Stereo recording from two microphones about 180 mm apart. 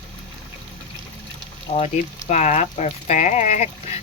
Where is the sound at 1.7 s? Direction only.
40° left (ahead or behind).